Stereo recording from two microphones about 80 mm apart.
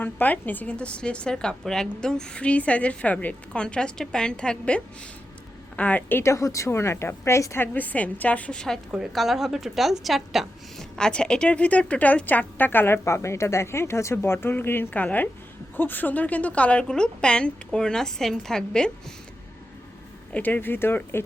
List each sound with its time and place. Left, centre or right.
0.0 s a woman's voice: left
6.3 s a woman's voice: left
7.7 s a woman's voice: left
8.9 s a woman's voice: centre
10.9 s a woman's voice: centre
20.3 s a woman's voice: left